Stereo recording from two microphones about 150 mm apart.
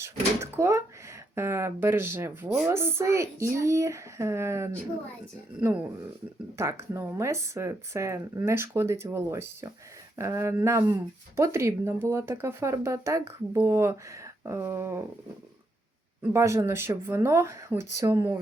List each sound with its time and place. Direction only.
0.5 s speech: 20° right (ahead or behind)
16.3 s speech: 20° right (ahead or behind)